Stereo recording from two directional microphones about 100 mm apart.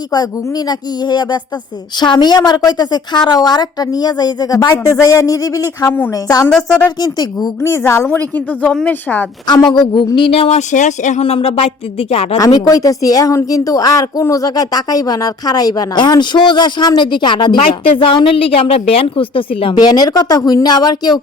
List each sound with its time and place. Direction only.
0.1 s a woman's voice: 45° left (ahead or behind)
6.5 s a woman's voice: 5° left (ahead or behind)
7.0 s a woman's voice: 40° left (ahead or behind)
8.0 s a woman's voice: 15° left (ahead or behind)
9.5 s a woman's voice: 45° left (ahead or behind)
10.2 s speech: 65° left (ahead or behind); by 12.4 s 85° left
12.4 s a woman's voice: 35° left (ahead or behind); by 19.7 s 65° left (ahead or behind)
19.8 s a woman's voice: 40° left (ahead or behind)